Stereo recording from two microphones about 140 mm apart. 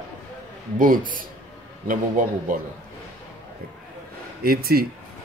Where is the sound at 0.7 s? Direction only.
80° right.